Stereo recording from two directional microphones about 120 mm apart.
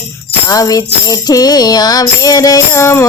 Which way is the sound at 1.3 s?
35° left (ahead or behind).